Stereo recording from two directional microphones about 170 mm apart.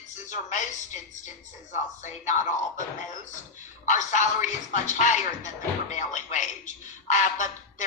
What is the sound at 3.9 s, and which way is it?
Speech, 45° left (ahead or behind).